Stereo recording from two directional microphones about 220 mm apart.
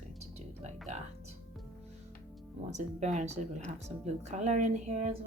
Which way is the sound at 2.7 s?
30° right (ahead or behind).